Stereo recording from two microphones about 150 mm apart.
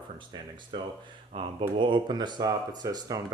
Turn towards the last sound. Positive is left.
turn(degrees=-25)  # may be behind; listen again after turning